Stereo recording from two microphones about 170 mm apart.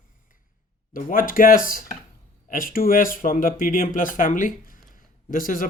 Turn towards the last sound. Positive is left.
turn(degrees=55)  # may be behind; listen again after turning